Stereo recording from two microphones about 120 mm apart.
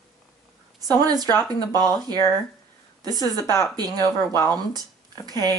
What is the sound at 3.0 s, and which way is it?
Speech, 35° right (ahead or behind).